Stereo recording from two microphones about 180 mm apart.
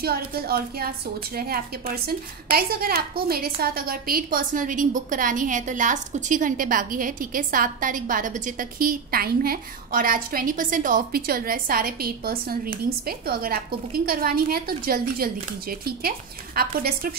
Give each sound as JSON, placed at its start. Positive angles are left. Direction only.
{"t": 0.0, "sound": "a woman's voice", "side_deg": -55}